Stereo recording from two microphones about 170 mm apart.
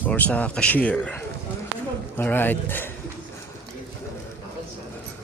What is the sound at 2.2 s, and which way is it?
Speech, 10° left (ahead or behind).